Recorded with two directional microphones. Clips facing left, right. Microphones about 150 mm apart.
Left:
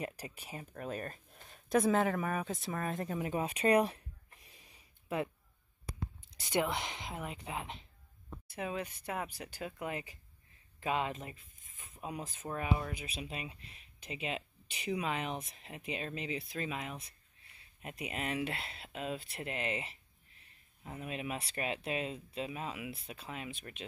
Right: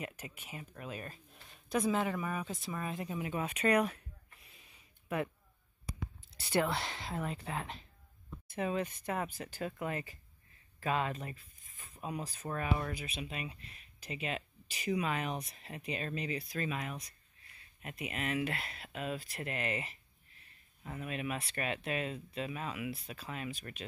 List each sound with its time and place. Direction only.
0.0 s speech: 35° left (ahead or behind)
2.7 s a sound: 45° left (ahead or behind); by 5.3 s 25° left (ahead or behind)
6.5 s speech: 15° left (ahead or behind)
12.4 s speech: 5° left (ahead or behind)
12.9 s speech: 25° left (ahead or behind)